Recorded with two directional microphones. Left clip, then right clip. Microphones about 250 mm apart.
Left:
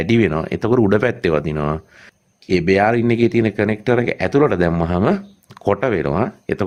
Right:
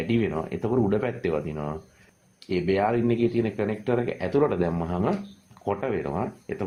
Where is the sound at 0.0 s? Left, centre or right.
Left.